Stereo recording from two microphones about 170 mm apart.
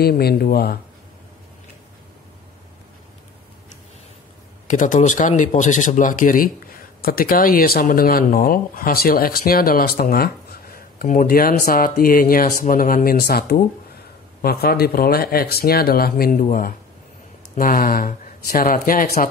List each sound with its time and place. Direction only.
0.0 s speech: 65° left (ahead or behind)
4.6 s speech: 50° left (ahead or behind)